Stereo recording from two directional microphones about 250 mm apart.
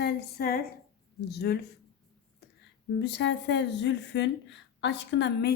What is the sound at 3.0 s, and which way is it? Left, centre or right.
Speech, left.